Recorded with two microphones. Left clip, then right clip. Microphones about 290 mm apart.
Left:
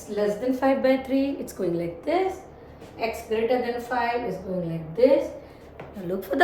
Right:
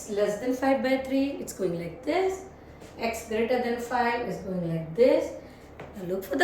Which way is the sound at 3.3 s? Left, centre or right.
Centre.